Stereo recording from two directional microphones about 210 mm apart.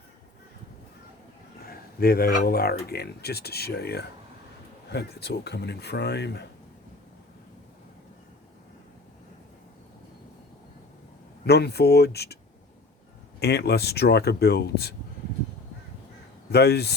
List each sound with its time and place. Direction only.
2.0 s speech: 45° left (ahead or behind)
11.4 s speech: 50° left (ahead or behind)
13.4 s speech: 50° left (ahead or behind)
16.5 s speech: 50° left (ahead or behind)